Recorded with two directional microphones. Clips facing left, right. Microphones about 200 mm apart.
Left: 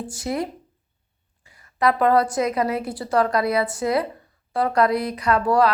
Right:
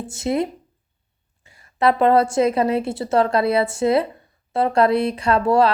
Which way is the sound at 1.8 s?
25° right (ahead or behind).